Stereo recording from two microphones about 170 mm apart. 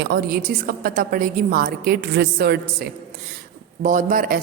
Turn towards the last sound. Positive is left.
turn(degrees=-55)  # may be behind; listen again after turning